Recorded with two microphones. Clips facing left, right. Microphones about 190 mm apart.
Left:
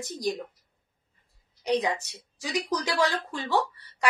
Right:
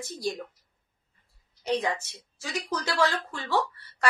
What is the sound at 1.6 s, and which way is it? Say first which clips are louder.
A woman's voice: left 2 dB; 15° left (ahead or behind).